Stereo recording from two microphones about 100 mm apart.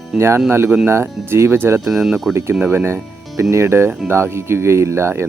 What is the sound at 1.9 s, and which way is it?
Speech, 5° right (ahead or behind).